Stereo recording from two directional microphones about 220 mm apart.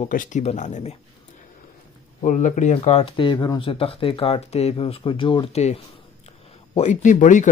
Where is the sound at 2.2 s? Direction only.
35° left (ahead or behind).